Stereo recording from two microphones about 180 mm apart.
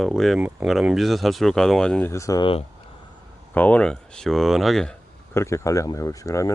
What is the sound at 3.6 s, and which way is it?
Speech, 10° left (ahead or behind).